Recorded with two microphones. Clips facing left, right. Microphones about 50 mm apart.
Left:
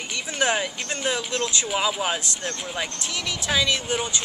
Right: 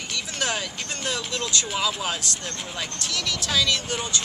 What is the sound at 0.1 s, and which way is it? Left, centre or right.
Speech, left.